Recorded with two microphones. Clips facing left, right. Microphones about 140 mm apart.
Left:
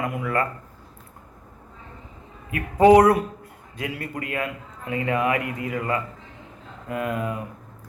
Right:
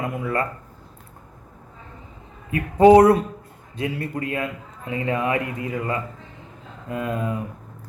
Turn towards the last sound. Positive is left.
turn(degrees=-25)  # may be behind; listen again after turning